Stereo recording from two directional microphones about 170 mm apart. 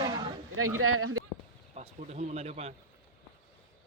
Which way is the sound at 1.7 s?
40° right (ahead or behind).